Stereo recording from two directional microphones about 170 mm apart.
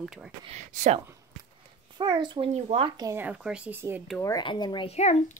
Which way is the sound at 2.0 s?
25° right (ahead or behind).